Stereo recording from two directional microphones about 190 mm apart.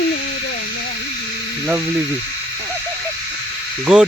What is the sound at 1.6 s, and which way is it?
Speech, 10° right (ahead or behind).